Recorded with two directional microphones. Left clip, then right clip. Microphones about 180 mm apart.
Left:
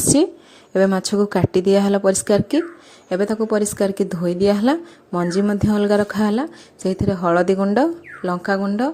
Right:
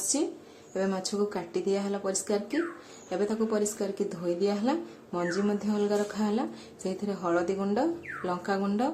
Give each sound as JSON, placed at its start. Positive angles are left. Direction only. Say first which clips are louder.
{"t": 0.7, "sound": "speech", "louder": "left 13 dB", "side_deg": 45}